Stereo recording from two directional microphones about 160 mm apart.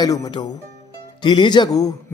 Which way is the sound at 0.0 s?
25° left (ahead or behind).